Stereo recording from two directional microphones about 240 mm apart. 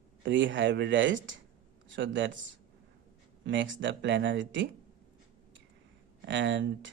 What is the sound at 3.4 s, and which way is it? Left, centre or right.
Speech, right.